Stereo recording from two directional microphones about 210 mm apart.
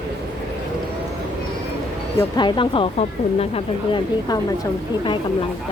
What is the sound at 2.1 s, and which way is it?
Speech, 20° left (ahead or behind).